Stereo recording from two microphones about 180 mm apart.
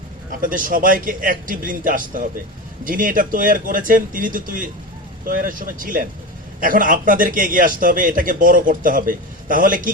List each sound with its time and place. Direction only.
0.3 s a man's voice: 50° right (ahead or behind)